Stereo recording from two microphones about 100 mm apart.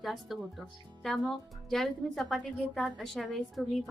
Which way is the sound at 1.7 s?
Centre (ahead or behind).